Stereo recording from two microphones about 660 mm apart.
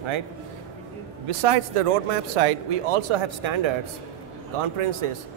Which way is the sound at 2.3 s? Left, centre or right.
Right.